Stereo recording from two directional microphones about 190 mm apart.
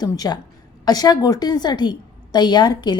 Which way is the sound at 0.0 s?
20° left (ahead or behind).